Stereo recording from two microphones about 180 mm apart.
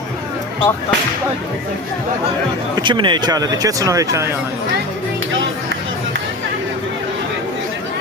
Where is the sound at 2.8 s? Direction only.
25° right (ahead or behind).